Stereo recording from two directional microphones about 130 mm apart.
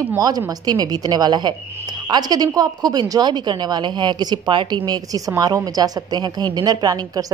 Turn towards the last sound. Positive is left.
turn(degrees=-30)  # may be behind; listen again after turning